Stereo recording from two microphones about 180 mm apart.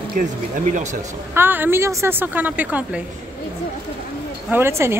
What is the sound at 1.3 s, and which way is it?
A woman's voice, 10° right (ahead or behind).